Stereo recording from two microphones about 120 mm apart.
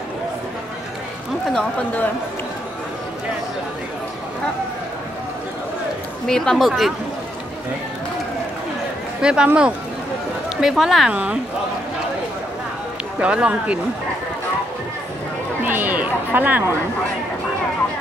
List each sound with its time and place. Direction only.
1.5 s speech: 10° left (ahead or behind)
6.2 s speech: 5° left (ahead or behind)
9.2 s speech: 5° right (ahead or behind)
13.2 s speech: 10° right (ahead or behind)
15.6 s a sound: 15° right (ahead or behind)